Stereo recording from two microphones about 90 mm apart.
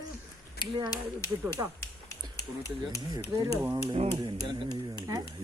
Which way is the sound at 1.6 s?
35° right (ahead or behind).